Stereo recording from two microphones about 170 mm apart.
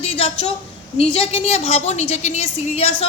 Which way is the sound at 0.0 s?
35° left (ahead or behind).